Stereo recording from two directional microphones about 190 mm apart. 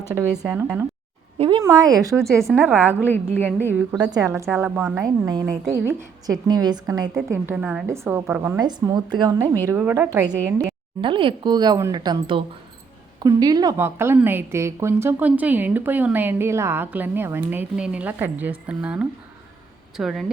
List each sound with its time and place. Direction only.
0.1 s a woman's voice: 10° right (ahead or behind)
1.4 s a woman's voice: 25° right (ahead or behind)
3.3 s a woman's voice: 10° left (ahead or behind)
3.7 s a woman's voice: 10° right (ahead or behind)
11.0 s a woman's voice: 25° right (ahead or behind); by 20.3 s centre (ahead or behind)